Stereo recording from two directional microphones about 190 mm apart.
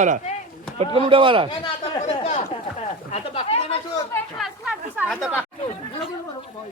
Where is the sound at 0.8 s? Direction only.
30° right (ahead or behind).